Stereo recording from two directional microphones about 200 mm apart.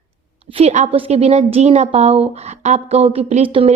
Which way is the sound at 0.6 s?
35° right (ahead or behind).